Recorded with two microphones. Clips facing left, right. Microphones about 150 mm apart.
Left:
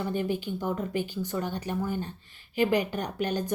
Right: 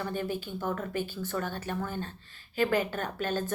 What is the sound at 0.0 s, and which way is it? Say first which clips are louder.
A woman's voice: left 4 dB; 15° left (ahead or behind).